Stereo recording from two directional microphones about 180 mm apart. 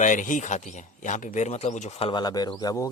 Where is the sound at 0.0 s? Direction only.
45° left (ahead or behind).